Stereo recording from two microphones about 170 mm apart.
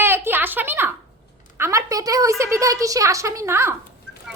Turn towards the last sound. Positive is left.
turn(degrees=-15)  # may be behind; listen again after turning